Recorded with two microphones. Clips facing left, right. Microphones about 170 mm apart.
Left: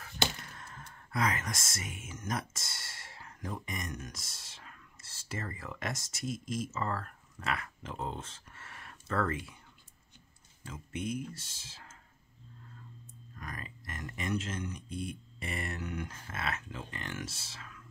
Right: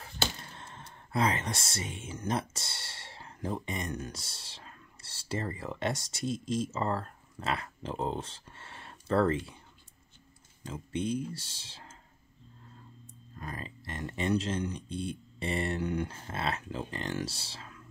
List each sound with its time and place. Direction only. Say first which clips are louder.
0.4 s speech: right 1 dB; 25° right (ahead or behind)
10.7 s speech: right 5 dB; 30° right (ahead or behind)
13.4 s speech: right 4 dB; 30° right (ahead or behind)